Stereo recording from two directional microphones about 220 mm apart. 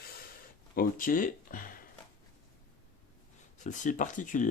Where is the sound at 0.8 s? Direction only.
40° left (ahead or behind).